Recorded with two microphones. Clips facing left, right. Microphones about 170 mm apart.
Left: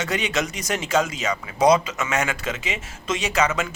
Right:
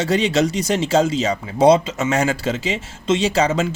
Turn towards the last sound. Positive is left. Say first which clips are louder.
# right 5 dB
turn(degrees=-30)  # may be behind; listen again after turning